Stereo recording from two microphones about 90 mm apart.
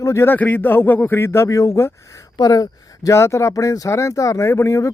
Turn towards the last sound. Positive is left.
turn(degrees=35)  # may be behind; listen again after turning